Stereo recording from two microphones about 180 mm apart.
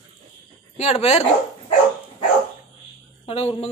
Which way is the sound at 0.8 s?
35° left (ahead or behind).